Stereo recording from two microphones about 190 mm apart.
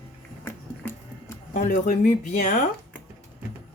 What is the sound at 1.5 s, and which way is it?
Speech, 40° left (ahead or behind).